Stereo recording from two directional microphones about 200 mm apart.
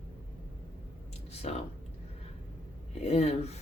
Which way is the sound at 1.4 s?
35° left (ahead or behind).